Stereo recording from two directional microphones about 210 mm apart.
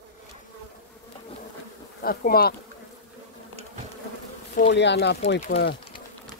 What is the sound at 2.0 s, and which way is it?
Speech, 45° left (ahead or behind).